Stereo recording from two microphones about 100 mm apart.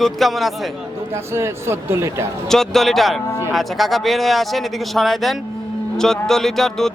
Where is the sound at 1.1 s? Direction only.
25° right (ahead or behind).